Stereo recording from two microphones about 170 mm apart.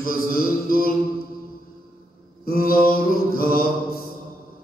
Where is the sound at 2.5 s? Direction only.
60° left (ahead or behind).